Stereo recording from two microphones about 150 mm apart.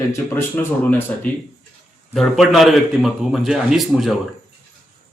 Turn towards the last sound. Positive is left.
turn(degrees=0)  # may be behind; listen again after turning